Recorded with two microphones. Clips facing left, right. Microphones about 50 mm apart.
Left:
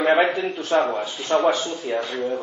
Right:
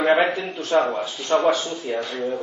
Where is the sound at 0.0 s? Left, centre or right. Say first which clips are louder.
Even; centre.